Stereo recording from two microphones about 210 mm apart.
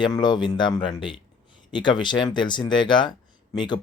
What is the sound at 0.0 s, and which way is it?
Speech, 20° left (ahead or behind).